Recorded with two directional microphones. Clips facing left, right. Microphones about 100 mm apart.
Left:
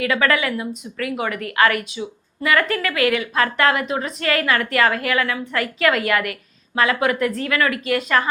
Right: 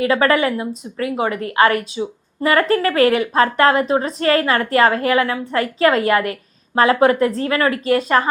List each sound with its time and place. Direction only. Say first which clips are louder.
0.0 s a woman's voice: right 4 dB; 30° right (ahead or behind)